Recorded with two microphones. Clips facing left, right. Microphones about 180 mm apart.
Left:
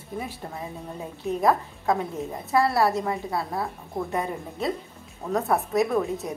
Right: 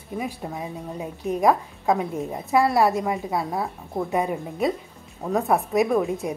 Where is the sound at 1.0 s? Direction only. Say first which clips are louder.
Right 2 dB; 15° right (ahead or behind).